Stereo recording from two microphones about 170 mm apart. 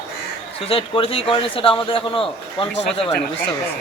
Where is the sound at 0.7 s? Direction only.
30° left (ahead or behind).